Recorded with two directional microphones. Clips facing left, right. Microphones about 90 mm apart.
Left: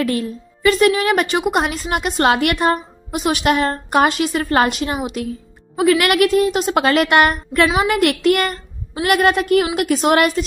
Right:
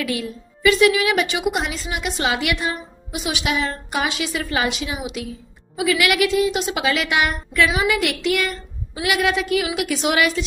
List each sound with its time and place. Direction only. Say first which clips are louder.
0.0 s a woman's voice: left 5 dB; 40° left (ahead or behind)
7.7 s a woman's voice: left 3 dB; 40° left (ahead or behind)
8.0 s a woman's voice: left 6 dB; 50° left (ahead or behind)